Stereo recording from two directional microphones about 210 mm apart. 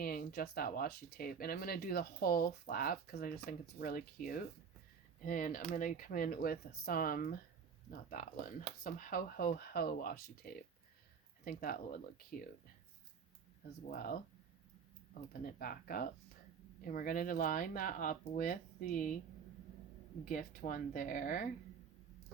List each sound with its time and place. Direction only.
0.0 s speech: 45° left (ahead or behind)
13.8 s speech: 45° left (ahead or behind)
15.3 s speech: 40° left (ahead or behind)
20.2 s speech: 40° left (ahead or behind)